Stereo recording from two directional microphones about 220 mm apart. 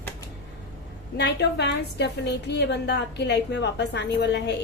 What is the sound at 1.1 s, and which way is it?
A woman's voice, 50° left (ahead or behind).